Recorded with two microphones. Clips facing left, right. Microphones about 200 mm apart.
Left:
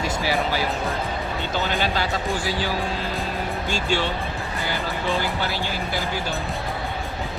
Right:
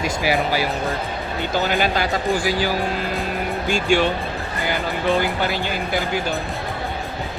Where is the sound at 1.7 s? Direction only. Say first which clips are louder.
Right 3 dB; 15° right (ahead or behind).